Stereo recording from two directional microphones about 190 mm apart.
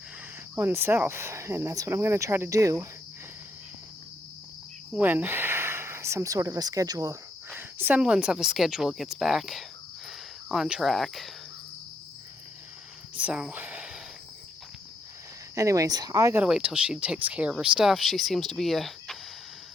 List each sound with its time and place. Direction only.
0.5 s speech: 10° right (ahead or behind)
4.9 s speech: 10° right (ahead or behind)
13.1 s a sound: 5° right (ahead or behind)
15.5 s speech: 15° right (ahead or behind)
16.4 s speech: 5° right (ahead or behind)